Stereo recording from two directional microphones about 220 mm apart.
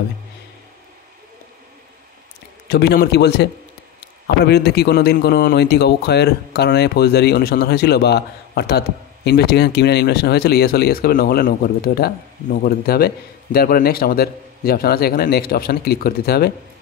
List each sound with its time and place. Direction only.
2.7 s speech: 45° left (ahead or behind)
4.5 s speech: 50° left (ahead or behind)